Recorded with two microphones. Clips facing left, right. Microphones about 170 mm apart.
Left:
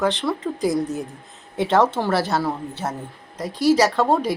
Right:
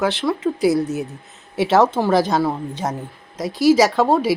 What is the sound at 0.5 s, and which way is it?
Speech, 75° right (ahead or behind).